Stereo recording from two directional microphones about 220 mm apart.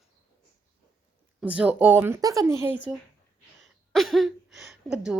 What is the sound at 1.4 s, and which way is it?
Speech, 5° right (ahead or behind).